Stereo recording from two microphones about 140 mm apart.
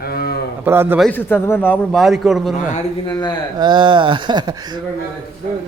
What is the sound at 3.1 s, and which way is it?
Speech, 30° left (ahead or behind).